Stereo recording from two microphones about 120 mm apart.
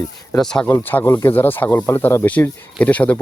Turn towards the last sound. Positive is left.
turn(degrees=10)  # may be behind; listen again after turning